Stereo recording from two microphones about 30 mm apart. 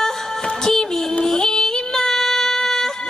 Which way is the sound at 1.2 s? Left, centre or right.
Centre.